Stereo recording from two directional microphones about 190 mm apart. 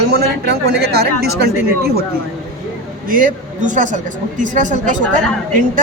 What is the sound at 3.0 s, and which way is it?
Speech, 45° right (ahead or behind).